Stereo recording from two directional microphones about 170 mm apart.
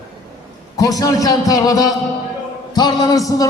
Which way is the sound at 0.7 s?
20° left (ahead or behind).